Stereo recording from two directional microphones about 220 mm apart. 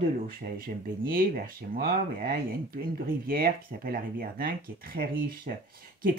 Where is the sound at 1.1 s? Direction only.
40° right (ahead or behind).